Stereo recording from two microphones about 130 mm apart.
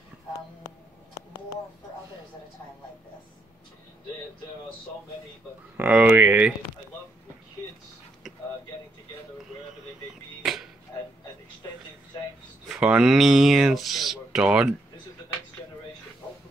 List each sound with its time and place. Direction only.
0.7 s a sound: 30° left (ahead or behind)
5.8 s speech: 15° right (ahead or behind)
10.4 s music: centre (ahead or behind)
12.6 s speech: 5° right (ahead or behind)